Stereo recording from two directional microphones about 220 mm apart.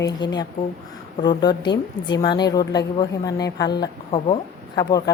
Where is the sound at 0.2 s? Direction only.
20° left (ahead or behind).